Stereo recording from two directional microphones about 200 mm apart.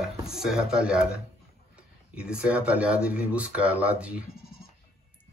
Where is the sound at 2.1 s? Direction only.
5° right (ahead or behind).